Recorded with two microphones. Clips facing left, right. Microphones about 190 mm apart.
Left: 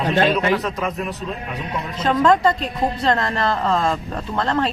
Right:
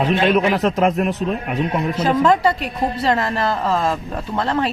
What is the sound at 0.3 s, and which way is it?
A man's voice, 60° right (ahead or behind).